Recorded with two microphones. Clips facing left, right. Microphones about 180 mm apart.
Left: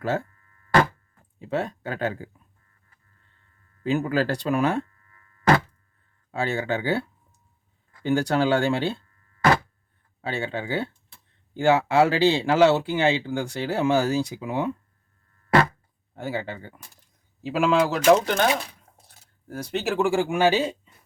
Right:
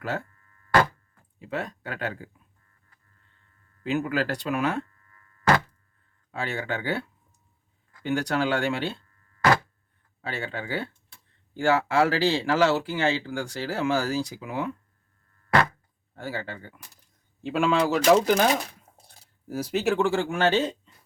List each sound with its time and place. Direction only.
1.4 s speech: 30° left (ahead or behind)
3.8 s speech: 35° left (ahead or behind)
6.4 s speech: 30° left (ahead or behind)
8.0 s speech: 30° left (ahead or behind)
10.2 s speech: 25° left (ahead or behind)
16.1 s speech: 20° left (ahead or behind)
17.4 s speech: centre (ahead or behind)